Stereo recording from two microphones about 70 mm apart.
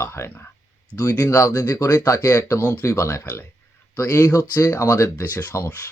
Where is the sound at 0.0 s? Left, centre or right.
Left.